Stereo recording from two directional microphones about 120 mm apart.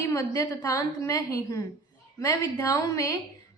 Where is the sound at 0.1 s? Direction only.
25° left (ahead or behind).